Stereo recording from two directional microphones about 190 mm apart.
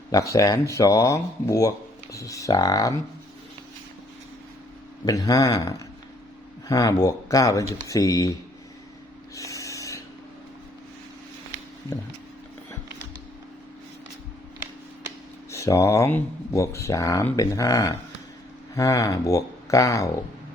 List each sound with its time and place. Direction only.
0.1 s speech: 15° left (ahead or behind)
5.0 s speech: 20° left (ahead or behind)
9.3 s a sound: 15° left (ahead or behind)
15.4 s speech: 15° left (ahead or behind)